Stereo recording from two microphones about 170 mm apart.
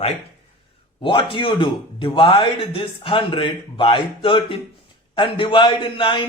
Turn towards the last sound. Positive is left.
turn(degrees=30)  # may be behind; listen again after turning